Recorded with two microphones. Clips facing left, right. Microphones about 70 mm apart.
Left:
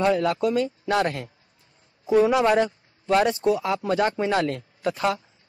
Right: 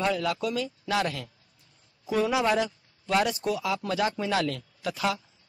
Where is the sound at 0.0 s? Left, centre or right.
Left.